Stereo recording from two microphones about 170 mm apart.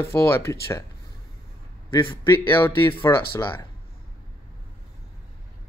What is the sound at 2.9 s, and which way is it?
Speech, 15° left (ahead or behind).